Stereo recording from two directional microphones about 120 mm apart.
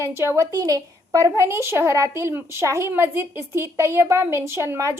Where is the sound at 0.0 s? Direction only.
25° right (ahead or behind).